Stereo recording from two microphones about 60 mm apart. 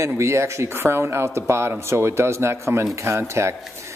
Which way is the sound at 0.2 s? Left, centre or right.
Right.